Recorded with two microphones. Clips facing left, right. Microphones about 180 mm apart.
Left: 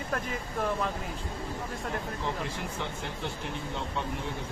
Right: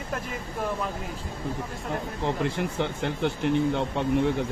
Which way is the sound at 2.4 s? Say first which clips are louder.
Right 8 dB; 65° right (ahead or behind).